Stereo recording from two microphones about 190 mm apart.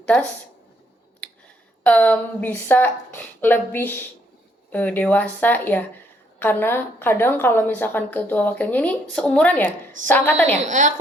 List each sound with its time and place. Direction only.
0.0 s a woman's voice: 5° left (ahead or behind)
1.8 s a woman's voice: 5° left (ahead or behind)
10.6 s a woman's voice: 40° right (ahead or behind)